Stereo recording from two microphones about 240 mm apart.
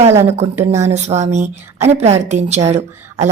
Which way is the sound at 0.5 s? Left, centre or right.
Centre.